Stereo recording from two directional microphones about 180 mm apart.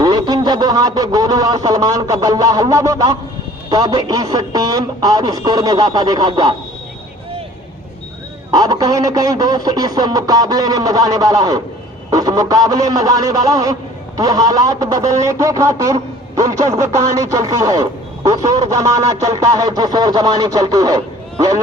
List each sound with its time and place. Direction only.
0.0 s a sound: 20° right (ahead or behind)
3.7 s a man's voice: 20° right (ahead or behind)
8.4 s a man's voice: 20° right (ahead or behind)